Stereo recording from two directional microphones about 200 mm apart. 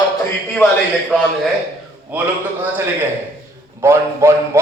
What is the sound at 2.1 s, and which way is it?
Speech, 10° right (ahead or behind).